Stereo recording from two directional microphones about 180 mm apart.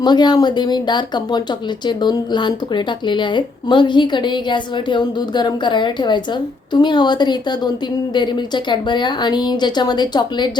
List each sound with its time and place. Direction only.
0.0 s a woman's voice: 25° left (ahead or behind)